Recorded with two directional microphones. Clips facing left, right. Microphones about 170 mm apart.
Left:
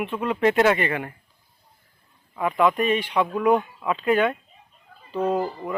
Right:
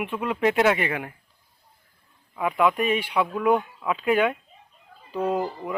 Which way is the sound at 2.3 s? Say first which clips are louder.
Left 1 dB; 5° right (ahead or behind).